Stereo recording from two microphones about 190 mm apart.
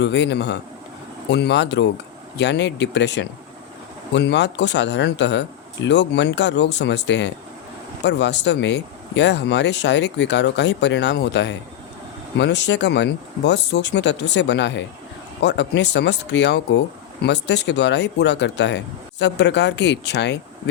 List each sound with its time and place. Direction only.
0.0 s speech: 65° left (ahead or behind)